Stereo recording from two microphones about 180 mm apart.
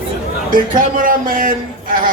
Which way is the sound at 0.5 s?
50° right (ahead or behind).